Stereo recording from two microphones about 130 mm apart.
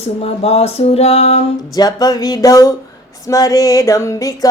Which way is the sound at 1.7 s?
30° left (ahead or behind).